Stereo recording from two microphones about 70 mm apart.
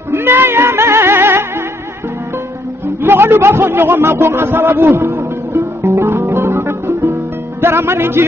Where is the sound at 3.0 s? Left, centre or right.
Right.